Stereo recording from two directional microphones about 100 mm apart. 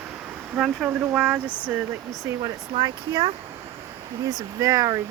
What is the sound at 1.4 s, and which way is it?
Speech, 20° left (ahead or behind).